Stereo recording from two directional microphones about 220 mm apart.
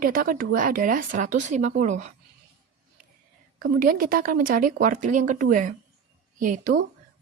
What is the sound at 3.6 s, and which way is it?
A woman's voice, 40° right (ahead or behind).